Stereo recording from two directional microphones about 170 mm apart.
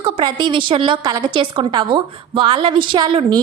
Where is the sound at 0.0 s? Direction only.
30° right (ahead or behind).